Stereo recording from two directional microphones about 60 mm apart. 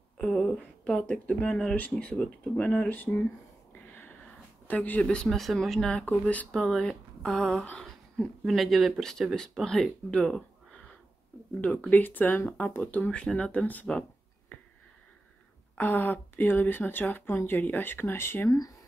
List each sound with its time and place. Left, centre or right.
0.2 s a sound: centre
0.6 s speech: centre; by 3.3 s left
3.7 s a sound: left
5.0 s speech: centre
5.4 s speech: centre
6.0 s speech: left
6.5 s speech: centre
10.1 s a sound: centre
11.9 s speech: left
15.8 s speech: left